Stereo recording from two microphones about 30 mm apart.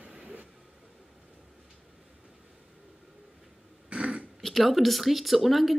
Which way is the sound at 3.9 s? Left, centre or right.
Right.